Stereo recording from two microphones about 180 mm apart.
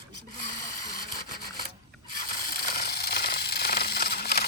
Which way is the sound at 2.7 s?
60° left (ahead or behind).